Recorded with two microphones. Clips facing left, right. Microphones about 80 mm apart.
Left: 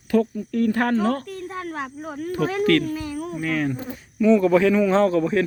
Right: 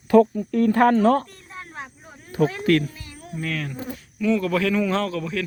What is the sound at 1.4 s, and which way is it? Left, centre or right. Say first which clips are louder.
Speech: left 8 dB; left.